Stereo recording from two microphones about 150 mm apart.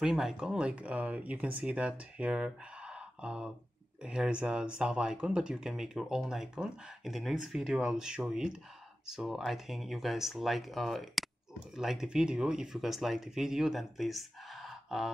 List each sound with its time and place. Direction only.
0.0 s speech: 5° right (ahead or behind)